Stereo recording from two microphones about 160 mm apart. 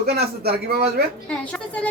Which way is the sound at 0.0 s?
80° right.